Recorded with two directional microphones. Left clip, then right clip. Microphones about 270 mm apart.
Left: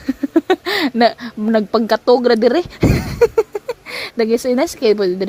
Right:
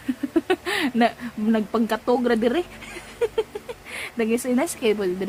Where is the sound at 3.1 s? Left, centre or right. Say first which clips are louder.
Left 10 dB; left.